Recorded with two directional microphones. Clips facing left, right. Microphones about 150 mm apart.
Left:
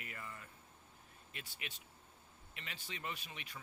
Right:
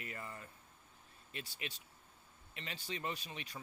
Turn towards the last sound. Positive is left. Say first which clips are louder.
# right 4 dB
turn(degrees=-35)  # may be behind; listen again after turning